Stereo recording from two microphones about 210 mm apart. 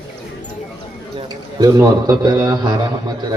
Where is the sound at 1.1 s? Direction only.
20° right (ahead or behind).